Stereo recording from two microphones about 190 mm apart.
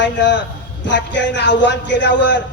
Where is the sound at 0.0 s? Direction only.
70° left (ahead or behind).